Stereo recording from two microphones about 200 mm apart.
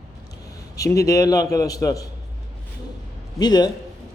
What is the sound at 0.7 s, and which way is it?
A man's voice, 15° left (ahead or behind).